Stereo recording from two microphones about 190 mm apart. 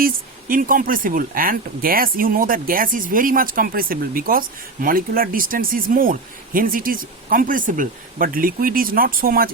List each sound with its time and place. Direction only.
0.0 s speech: 45° right (ahead or behind)